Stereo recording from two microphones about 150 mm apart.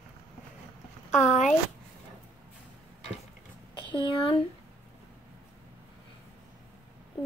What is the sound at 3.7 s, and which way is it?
Speech, 30° left (ahead or behind).